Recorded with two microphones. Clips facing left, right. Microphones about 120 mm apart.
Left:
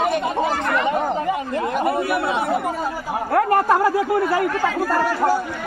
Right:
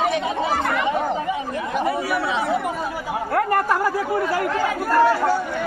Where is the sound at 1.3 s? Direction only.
50° left (ahead or behind).